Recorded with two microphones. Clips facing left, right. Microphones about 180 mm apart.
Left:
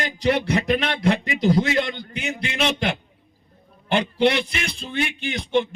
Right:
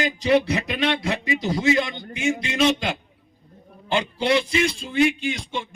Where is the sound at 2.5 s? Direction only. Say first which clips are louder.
Right 1 dB; 60° left (ahead or behind).